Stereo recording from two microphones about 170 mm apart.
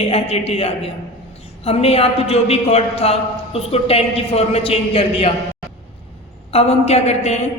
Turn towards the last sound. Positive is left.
turn(degrees=40)  # may be behind; listen again after turning